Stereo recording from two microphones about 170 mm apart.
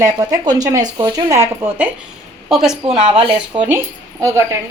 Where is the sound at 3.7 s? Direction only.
15° right (ahead or behind).